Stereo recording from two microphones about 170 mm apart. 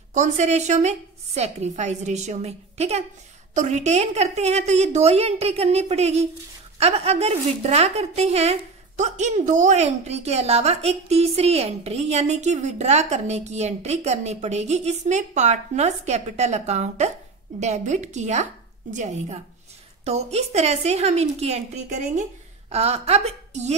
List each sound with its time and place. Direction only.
0.1 s a woman's voice: 45° right (ahead or behind)